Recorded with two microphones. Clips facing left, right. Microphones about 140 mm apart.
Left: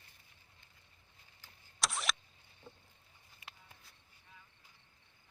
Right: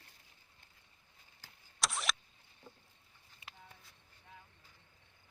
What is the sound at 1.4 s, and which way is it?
Vehicle, 90° right.